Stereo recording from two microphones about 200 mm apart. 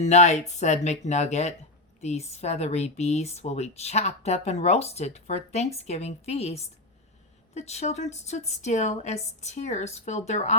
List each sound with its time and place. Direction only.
0.0 s speech: 35° left (ahead or behind)